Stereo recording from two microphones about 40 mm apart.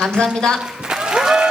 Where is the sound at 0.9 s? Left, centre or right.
Centre.